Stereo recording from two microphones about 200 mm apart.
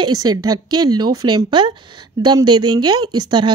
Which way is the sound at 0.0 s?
20° right (ahead or behind).